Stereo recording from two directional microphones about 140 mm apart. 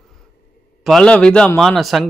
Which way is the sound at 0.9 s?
5° left (ahead or behind).